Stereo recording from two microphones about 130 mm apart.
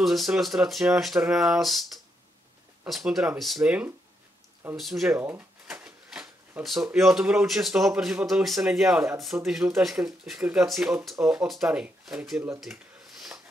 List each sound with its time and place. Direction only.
0.0 s speech: centre (ahead or behind)
2.9 s speech: centre (ahead or behind)
4.7 s speech: centre (ahead or behind)
5.1 s speech: 20° right (ahead or behind)
5.7 s drawer open or close: 5° right (ahead or behind)
6.9 s speech: centre (ahead or behind)
12.5 s a sound: centre (ahead or behind)